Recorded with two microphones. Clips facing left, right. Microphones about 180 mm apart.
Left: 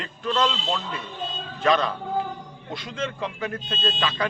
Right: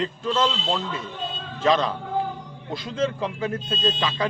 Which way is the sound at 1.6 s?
25° right (ahead or behind).